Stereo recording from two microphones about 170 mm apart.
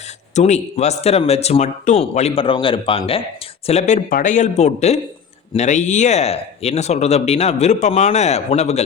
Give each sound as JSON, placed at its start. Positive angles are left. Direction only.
{"t": 0.3, "sound": "speech", "side_deg": 40}